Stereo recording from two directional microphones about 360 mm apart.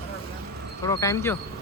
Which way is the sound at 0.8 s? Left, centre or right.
Centre.